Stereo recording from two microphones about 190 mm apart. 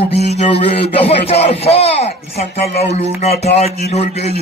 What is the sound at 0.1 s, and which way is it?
Speech, 35° left (ahead or behind).